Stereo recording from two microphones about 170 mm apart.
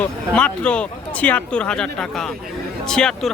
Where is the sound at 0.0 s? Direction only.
5° left (ahead or behind).